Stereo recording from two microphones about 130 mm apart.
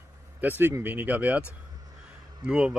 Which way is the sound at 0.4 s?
15° right (ahead or behind).